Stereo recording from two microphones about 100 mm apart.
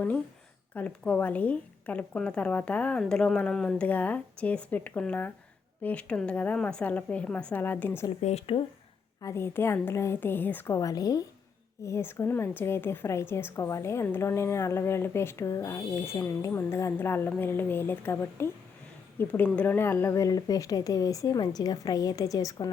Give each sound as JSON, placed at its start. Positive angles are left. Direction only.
{"t": 0.7, "sound": "speech", "side_deg": 15}
{"t": 8.3, "sound": "speech", "side_deg": 80}
{"t": 9.2, "sound": "a woman's voice", "side_deg": 25}
{"t": 10.8, "sound": "a woman's voice", "side_deg": 35}